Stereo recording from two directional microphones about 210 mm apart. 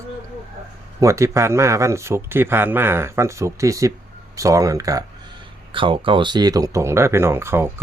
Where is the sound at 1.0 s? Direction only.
15° right (ahead or behind).